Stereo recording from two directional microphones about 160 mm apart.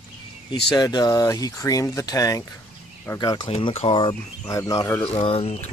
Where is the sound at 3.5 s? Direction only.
40° left (ahead or behind).